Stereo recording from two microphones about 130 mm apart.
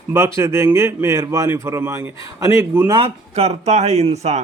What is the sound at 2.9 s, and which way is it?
Speech, 50° right (ahead or behind).